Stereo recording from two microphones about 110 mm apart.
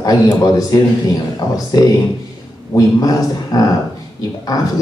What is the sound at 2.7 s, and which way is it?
Speech, 35° left (ahead or behind).